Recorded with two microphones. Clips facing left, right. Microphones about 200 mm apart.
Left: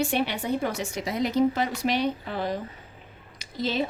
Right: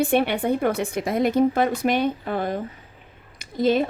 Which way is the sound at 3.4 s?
50° right (ahead or behind).